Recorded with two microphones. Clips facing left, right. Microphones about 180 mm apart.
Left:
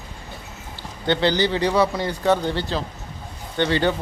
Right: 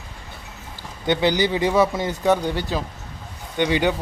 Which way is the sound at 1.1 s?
15° right (ahead or behind).